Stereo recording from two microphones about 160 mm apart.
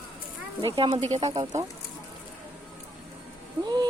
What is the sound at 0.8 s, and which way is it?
Speech, 35° right (ahead or behind).